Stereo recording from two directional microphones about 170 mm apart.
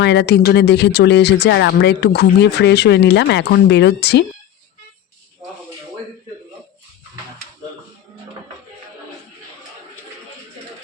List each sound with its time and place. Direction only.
0.0 s speech: 85° left